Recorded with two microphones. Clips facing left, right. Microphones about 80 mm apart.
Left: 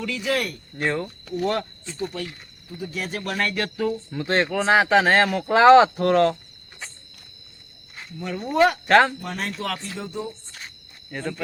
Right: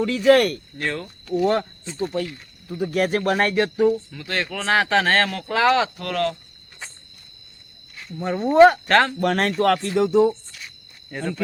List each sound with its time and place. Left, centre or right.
0.0 s speech: right
0.3 s speech: right
0.8 s speech: centre
1.5 s speech: right
2.6 s speech: right
3.5 s speech: right
4.1 s speech: left
4.5 s speech: centre
5.5 s speech: left
8.2 s speech: right
8.9 s speech: centre
9.2 s speech: right
10.5 s a sound: left
11.1 s speech: centre